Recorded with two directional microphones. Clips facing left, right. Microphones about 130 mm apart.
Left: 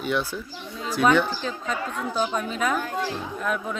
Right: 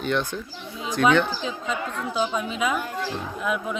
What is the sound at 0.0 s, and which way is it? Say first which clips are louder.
Speech: right 1 dB; 5° left (ahead or behind).